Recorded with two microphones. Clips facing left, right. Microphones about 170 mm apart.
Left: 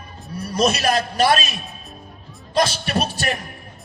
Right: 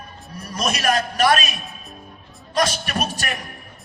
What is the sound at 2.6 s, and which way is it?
Speech, 30° left (ahead or behind).